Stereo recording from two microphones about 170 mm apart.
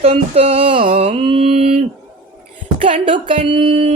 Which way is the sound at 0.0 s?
35° right (ahead or behind).